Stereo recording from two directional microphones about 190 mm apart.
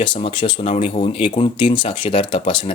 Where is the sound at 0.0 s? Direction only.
25° left (ahead or behind).